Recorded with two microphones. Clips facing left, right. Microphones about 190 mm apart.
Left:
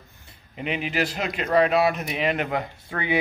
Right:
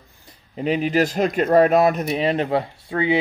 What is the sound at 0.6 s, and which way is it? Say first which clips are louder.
Speech: right 7 dB; 35° right (ahead or behind).